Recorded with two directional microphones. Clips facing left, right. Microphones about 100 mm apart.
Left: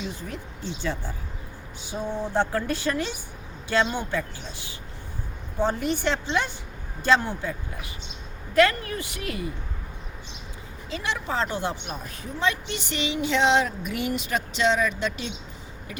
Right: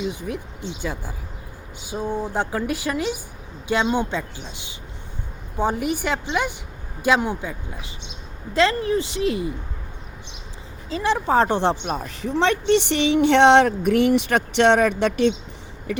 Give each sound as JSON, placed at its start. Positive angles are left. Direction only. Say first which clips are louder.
{"t": 0.0, "sound": "speech", "louder": "right 7 dB", "side_deg": -15}
{"t": 10.8, "sound": "speech", "louder": "right 8 dB", "side_deg": -35}
{"t": 11.6, "sound": "a woman's voice", "louder": "right 8 dB", "side_deg": -85}